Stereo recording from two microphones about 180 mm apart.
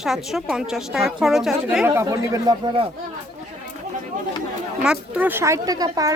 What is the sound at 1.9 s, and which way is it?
Speech, 15° right (ahead or behind).